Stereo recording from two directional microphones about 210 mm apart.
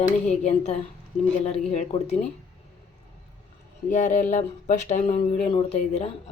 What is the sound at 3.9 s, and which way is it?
A woman's voice, 35° left (ahead or behind).